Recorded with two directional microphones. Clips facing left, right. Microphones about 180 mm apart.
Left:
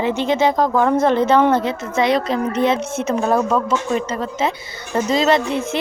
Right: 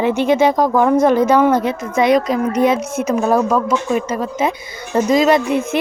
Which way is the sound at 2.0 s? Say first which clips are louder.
Right 4 dB; 25° left (ahead or behind).